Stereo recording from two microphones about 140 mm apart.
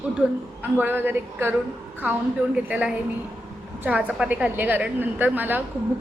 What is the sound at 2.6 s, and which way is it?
A woman's voice, 10° right (ahead or behind).